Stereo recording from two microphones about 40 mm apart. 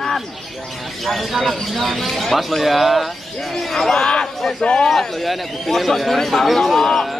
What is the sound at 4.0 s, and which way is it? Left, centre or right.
Speech, centre.